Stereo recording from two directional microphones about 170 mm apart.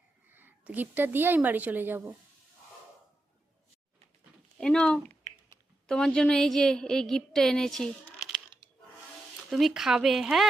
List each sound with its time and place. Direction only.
0.3 s a woman's voice: 10° right (ahead or behind)
4.5 s a woman's voice: 5° left (ahead or behind)
9.5 s a woman's voice: centre (ahead or behind)